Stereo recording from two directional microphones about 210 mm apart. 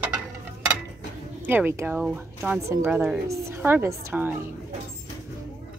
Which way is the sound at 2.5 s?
15° right (ahead or behind).